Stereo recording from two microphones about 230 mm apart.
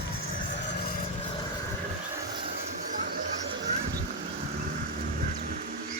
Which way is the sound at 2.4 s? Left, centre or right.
Right.